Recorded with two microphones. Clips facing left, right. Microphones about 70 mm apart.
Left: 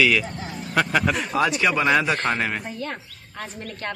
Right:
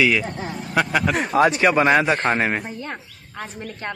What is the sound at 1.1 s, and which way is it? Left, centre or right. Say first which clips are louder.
Speech: right 5 dB; right.